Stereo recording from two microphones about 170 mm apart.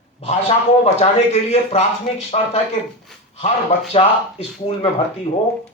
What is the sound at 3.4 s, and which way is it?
Speech, 35° left (ahead or behind).